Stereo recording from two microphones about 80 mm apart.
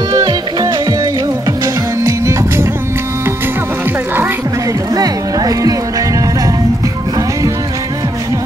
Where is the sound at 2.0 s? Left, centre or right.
Right.